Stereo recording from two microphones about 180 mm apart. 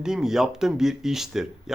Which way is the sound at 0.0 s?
5° right (ahead or behind).